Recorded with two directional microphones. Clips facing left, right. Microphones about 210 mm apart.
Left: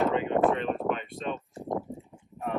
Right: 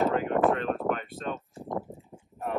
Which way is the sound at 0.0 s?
Centre (ahead or behind).